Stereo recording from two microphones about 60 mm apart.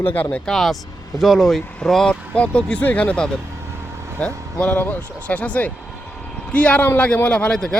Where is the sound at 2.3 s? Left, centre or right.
Left.